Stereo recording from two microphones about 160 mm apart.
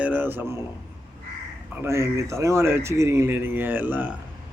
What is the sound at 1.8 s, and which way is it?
Speech, 15° right (ahead or behind).